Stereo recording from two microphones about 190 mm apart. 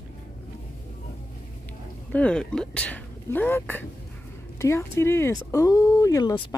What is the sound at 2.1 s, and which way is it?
Speech, 5° left (ahead or behind).